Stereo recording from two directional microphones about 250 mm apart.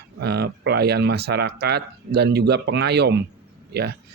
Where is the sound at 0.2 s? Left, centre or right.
Right.